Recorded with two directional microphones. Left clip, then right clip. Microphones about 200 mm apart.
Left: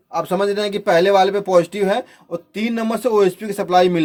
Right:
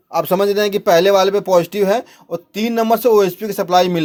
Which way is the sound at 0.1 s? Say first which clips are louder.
Right 4 dB; 40° right (ahead or behind).